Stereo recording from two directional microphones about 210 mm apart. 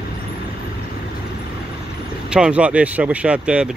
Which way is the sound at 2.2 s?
5° right (ahead or behind).